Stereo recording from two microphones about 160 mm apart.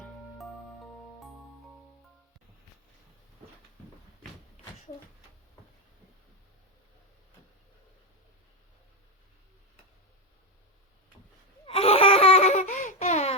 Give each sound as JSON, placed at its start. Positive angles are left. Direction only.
{"t": 11.6, "sound": "laughter", "side_deg": 35}